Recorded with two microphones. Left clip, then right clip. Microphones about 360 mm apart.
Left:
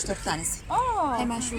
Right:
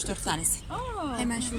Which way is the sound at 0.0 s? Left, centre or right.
Centre.